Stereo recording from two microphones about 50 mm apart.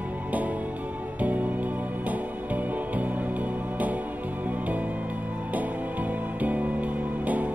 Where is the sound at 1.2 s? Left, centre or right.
Right.